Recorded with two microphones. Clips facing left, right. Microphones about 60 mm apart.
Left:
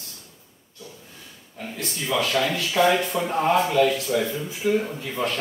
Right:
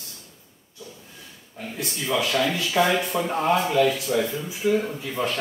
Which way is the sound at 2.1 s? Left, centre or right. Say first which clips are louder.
Even; centre.